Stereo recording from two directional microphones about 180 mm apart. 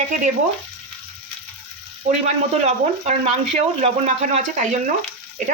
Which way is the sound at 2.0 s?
40° right (ahead or behind).